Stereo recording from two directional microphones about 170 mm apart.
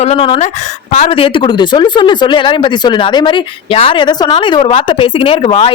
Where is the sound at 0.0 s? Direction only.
35° left (ahead or behind).